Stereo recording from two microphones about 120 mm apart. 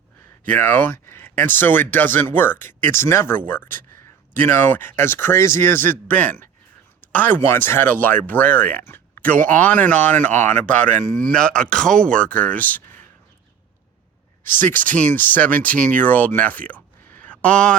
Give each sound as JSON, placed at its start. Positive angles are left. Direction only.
{"t": 0.4, "sound": "speech", "side_deg": 15}
{"t": 14.6, "sound": "speech", "side_deg": 15}